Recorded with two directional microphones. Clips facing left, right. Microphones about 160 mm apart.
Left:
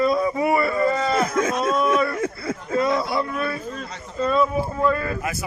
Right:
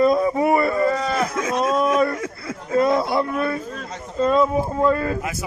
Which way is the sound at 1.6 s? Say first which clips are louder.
Right 5 dB; 35° right (ahead or behind).